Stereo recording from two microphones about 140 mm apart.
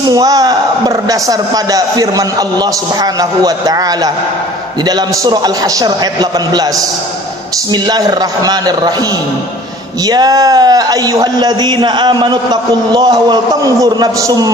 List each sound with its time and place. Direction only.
0.1 s speech: 25° right (ahead or behind)
7.7 s speech: 30° right (ahead or behind)
10.0 s speech: 30° right (ahead or behind)